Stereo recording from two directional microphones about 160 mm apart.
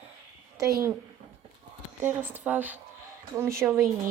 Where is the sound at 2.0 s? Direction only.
10° right (ahead or behind).